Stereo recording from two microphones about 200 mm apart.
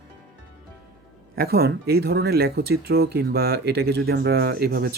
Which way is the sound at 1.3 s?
50° right (ahead or behind).